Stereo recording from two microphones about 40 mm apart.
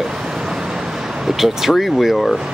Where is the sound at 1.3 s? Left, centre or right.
Centre.